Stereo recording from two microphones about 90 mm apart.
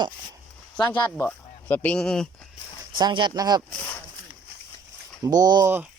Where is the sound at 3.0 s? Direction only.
55° right (ahead or behind).